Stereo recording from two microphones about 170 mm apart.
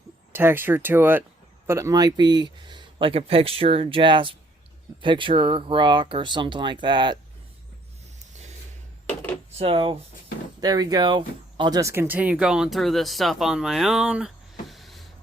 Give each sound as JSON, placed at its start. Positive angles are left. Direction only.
{"t": 0.3, "sound": "speech", "side_deg": -10}
{"t": 9.6, "sound": "speech", "side_deg": -35}
{"t": 14.7, "sound": "a sound", "side_deg": 0}